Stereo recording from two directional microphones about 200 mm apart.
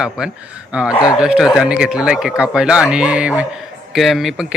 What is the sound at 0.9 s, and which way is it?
Speech, 20° left (ahead or behind).